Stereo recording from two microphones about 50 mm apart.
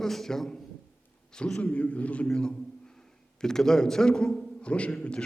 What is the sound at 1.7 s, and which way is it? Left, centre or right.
Speech, left.